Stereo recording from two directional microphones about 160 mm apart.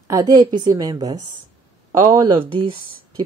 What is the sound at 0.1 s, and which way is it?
A woman's voice, 25° right (ahead or behind).